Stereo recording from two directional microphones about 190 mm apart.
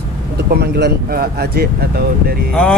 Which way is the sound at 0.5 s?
60° right (ahead or behind).